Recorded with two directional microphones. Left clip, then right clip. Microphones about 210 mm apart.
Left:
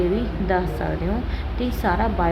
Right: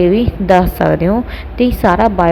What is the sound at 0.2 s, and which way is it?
A woman's voice, 30° right (ahead or behind).